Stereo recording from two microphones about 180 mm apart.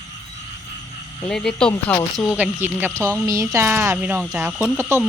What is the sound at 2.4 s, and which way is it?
Speech, 10° right (ahead or behind).